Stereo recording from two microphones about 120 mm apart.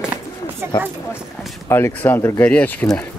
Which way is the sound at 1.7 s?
15° left (ahead or behind).